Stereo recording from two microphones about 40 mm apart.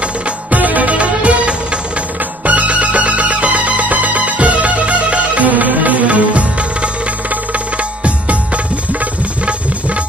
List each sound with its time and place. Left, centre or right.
0.5 s music: right